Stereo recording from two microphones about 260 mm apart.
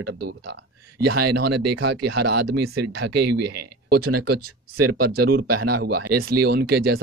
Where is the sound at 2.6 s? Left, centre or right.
Right.